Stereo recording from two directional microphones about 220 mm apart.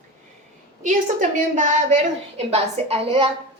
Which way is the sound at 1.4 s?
35° right (ahead or behind).